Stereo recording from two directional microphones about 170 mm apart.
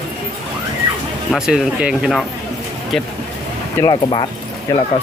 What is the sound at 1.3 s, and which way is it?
Speech, 5° right (ahead or behind).